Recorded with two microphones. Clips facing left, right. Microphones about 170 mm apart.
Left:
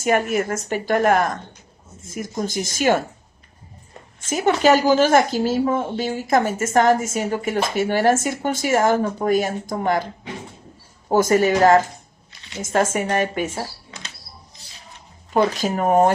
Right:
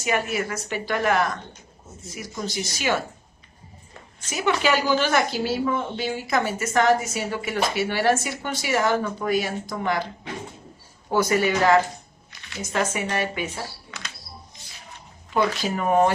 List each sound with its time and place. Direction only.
0.0 s speech: 50° left (ahead or behind)
4.3 s speech: 45° left (ahead or behind)
11.1 s speech: 45° left (ahead or behind)
12.3 s a sound: 25° left (ahead or behind)
12.6 s speech: 45° left (ahead or behind)
15.3 s speech: 40° left (ahead or behind)